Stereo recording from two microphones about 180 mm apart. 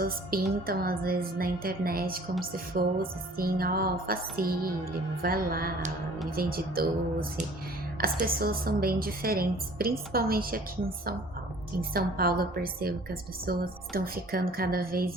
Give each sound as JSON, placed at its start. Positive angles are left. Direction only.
{"t": 0.0, "sound": "a woman's voice", "side_deg": -55}